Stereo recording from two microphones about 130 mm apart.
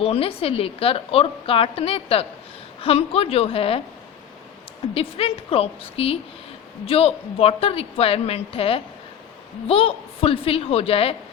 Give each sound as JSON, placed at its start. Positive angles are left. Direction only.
{"t": 0.0, "sound": "a woman's voice", "side_deg": 50}
{"t": 4.9, "sound": "a woman's voice", "side_deg": 50}